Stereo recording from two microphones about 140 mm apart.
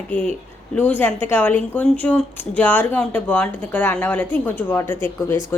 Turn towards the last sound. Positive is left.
turn(degrees=20)  # may be behind; listen again after turning